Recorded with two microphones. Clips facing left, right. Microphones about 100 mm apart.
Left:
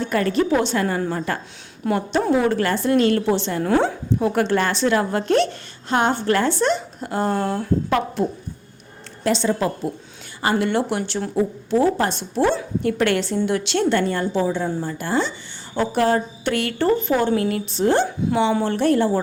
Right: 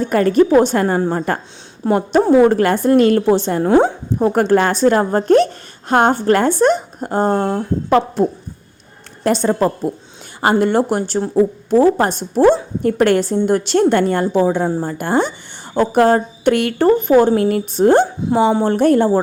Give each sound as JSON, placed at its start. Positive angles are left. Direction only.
{"t": 0.0, "sound": "a woman's voice", "side_deg": -40}
{"t": 3.6, "sound": "a woman's voice", "side_deg": -25}
{"t": 4.2, "sound": "a woman's voice", "side_deg": -45}
{"t": 14.7, "sound": "a woman's voice", "side_deg": -40}
{"t": 14.9, "sound": "a woman's voice", "side_deg": -55}
{"t": 18.5, "sound": "a woman's voice", "side_deg": -35}
{"t": 18.8, "sound": "a woman's voice", "side_deg": -45}